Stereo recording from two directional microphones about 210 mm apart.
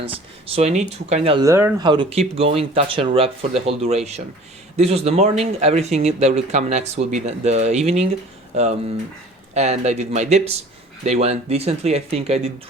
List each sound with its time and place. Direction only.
0.0 s speech: 25° right (ahead or behind)
1.5 s speech: 15° right (ahead or behind); by 8.1 s 30° right (ahead or behind)
9.6 s speech: 30° right (ahead or behind)